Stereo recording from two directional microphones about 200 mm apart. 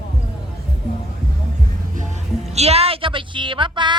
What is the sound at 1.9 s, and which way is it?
Speech, 35° right (ahead or behind).